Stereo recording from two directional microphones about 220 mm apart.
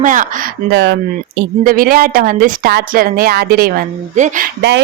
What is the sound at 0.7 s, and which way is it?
A woman's voice, 50° right (ahead or behind).